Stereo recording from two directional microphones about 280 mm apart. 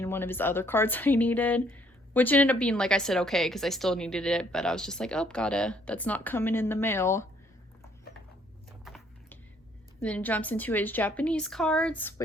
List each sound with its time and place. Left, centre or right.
0.0 s speech: centre
8.8 s a sound: centre
10.0 s speech: centre